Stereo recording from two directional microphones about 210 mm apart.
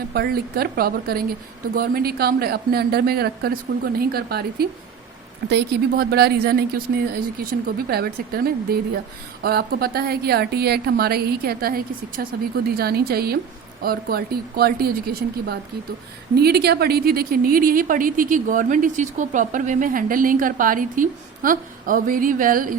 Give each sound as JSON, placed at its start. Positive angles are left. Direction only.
{"t": 0.1, "sound": "a woman's voice", "side_deg": -45}